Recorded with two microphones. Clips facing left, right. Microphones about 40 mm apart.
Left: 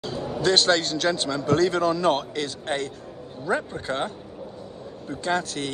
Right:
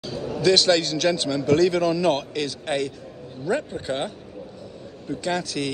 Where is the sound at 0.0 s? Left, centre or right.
Left.